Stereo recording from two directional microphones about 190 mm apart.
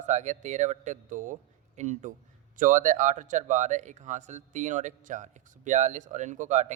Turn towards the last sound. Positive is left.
turn(degrees=-40)  # may be behind; listen again after turning